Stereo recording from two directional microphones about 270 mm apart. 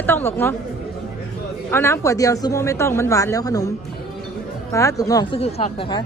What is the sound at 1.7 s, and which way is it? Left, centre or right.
Speech, centre.